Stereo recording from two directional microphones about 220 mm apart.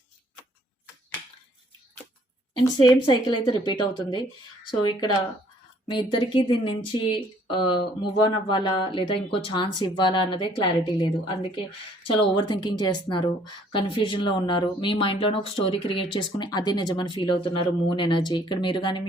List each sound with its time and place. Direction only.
2.6 s a woman's voice: 20° left (ahead or behind)
5.9 s a woman's voice: 20° left (ahead or behind)